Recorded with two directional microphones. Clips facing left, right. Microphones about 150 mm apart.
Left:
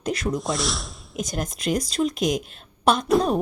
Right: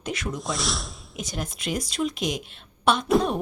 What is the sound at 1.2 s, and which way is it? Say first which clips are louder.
A woman's voice: left 5 dB; 45° left (ahead or behind).